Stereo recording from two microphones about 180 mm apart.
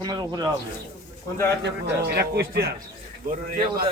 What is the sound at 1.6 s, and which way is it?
A man's voice, 65° right (ahead or behind).